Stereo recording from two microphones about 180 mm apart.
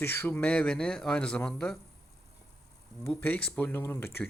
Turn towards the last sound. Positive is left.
turn(degrees=10)  # may be behind; listen again after turning